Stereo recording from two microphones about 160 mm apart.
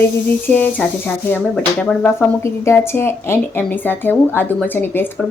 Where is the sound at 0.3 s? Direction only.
10° left (ahead or behind).